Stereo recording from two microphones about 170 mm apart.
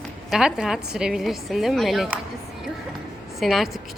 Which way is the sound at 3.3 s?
Centre (ahead or behind).